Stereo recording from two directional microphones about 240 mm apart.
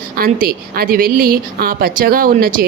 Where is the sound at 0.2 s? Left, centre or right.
Right.